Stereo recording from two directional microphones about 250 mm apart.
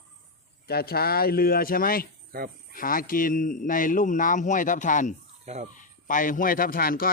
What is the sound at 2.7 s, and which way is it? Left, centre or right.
Speech, left.